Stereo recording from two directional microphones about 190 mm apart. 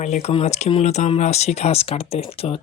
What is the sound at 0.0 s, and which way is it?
Speech, 35° left (ahead or behind).